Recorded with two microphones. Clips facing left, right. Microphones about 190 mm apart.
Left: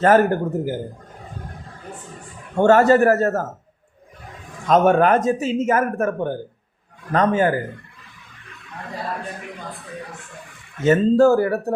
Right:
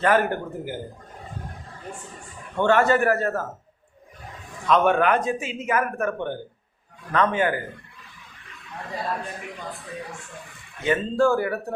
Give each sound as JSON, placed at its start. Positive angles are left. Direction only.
{"t": 0.0, "sound": "speech", "side_deg": 45}
{"t": 2.6, "sound": "speech", "side_deg": 40}
{"t": 4.6, "sound": "speech", "side_deg": 40}
{"t": 10.8, "sound": "speech", "side_deg": 40}